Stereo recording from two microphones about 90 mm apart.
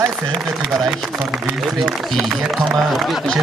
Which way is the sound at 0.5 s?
Centre (ahead or behind).